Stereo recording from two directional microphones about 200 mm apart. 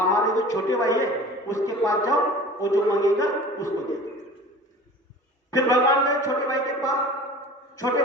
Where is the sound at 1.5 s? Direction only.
15° left (ahead or behind).